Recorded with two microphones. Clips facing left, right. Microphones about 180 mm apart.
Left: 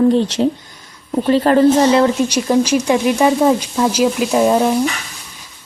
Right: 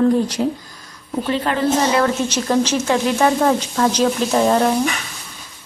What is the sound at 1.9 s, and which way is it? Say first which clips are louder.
Speech: left 4 dB; 15° left (ahead or behind).